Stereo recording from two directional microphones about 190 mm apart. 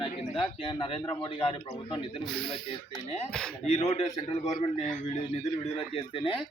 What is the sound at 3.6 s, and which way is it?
Speech, 35° left (ahead or behind).